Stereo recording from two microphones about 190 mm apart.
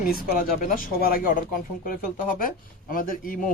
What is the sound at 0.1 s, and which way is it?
Speech, 50° left (ahead or behind).